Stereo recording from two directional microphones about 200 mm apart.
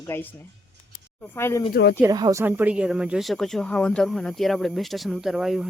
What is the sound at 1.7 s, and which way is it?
Speech, 50° left (ahead or behind).